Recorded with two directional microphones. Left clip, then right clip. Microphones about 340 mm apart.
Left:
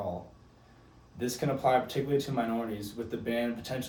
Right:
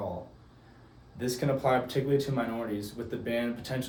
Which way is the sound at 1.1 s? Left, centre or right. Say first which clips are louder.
Right 2 dB; centre.